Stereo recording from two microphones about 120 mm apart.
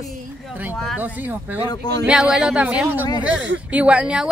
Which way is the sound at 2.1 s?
5° right (ahead or behind).